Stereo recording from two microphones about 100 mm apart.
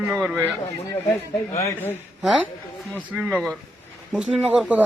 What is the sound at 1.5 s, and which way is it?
Speech, 25° left (ahead or behind).